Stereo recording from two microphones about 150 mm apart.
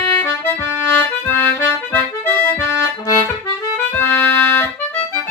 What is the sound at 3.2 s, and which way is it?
Accordion, 15° left (ahead or behind).